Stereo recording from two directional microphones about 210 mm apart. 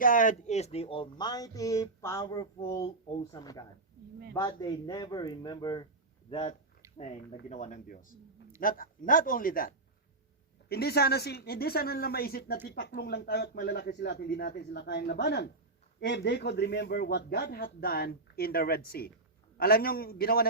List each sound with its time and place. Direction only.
0.0 s a man's voice: 40° left (ahead or behind)